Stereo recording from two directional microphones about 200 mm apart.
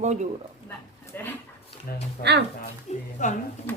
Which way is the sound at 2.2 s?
40° left (ahead or behind).